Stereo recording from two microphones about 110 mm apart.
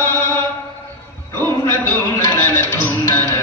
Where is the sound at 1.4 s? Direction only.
20° left (ahead or behind).